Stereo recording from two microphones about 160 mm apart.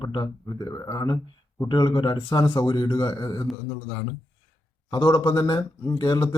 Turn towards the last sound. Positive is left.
turn(degrees=25)  # may be behind; listen again after turning